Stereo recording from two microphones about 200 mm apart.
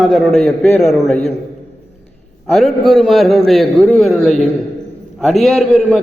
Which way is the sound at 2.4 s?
Centre (ahead or behind).